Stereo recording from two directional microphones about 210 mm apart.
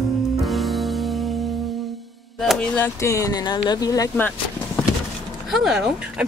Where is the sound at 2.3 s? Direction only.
Centre (ahead or behind).